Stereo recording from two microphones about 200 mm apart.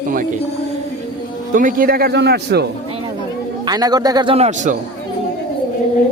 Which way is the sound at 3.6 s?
20° right (ahead or behind).